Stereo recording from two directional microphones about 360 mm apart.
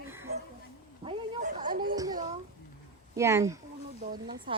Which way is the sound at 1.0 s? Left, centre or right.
Centre.